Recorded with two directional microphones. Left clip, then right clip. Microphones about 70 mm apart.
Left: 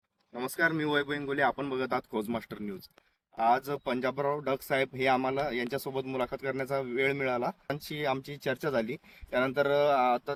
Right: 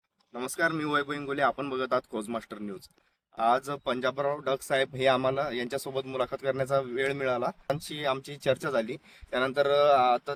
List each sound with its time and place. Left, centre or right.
0.3 s speech: right